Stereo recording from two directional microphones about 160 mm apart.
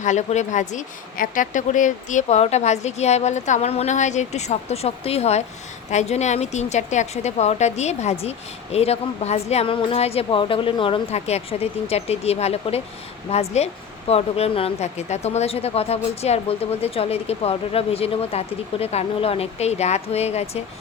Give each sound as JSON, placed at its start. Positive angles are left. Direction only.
{"t": 0.0, "sound": "a woman's voice", "side_deg": 50}